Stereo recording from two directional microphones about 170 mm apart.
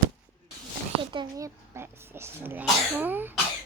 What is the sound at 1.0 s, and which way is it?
A child's voice, 30° right (ahead or behind).